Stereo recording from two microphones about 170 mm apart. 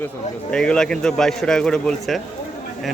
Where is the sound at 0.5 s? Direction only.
5° left (ahead or behind).